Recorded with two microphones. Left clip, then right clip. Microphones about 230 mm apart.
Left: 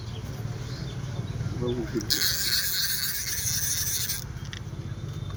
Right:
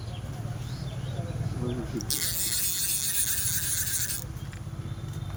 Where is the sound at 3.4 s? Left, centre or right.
Right.